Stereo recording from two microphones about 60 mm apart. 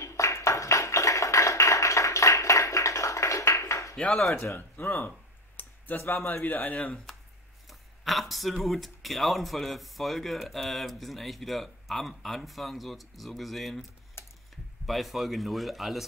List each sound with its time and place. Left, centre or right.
0.0 s a sound: left
3.9 s speech: centre
4.6 s speech: left
8.0 s a man's voice: centre
14.2 s a sound: left
14.9 s a man's voice: centre